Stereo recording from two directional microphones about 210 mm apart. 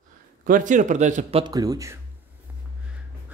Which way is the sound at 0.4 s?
40° right (ahead or behind).